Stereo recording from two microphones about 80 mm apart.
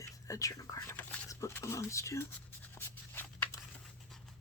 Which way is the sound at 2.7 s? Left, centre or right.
Left.